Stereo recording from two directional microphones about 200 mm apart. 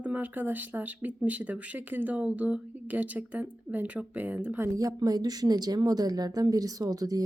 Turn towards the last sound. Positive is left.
turn(degrees=-20)  # may be behind; listen again after turning